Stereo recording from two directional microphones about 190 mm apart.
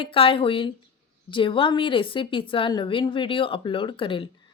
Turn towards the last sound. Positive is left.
turn(degrees=25)  # may be behind; listen again after turning